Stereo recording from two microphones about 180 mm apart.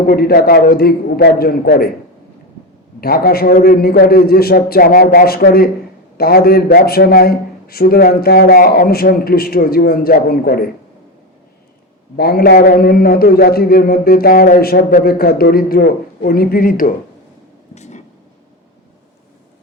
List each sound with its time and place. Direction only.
0.0 s a man's voice: 55° left (ahead or behind)
3.0 s a man's voice: 55° left (ahead or behind)
12.1 s a man's voice: 55° left (ahead or behind)
17.7 s a sound: 40° left (ahead or behind)